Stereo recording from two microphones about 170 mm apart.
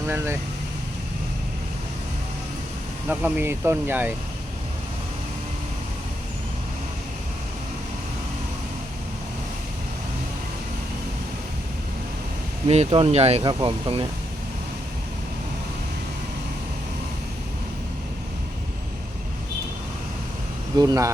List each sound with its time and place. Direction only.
3.1 s speech: 10° right (ahead or behind)
12.6 s speech: 40° right (ahead or behind)
20.7 s speech: 20° right (ahead or behind)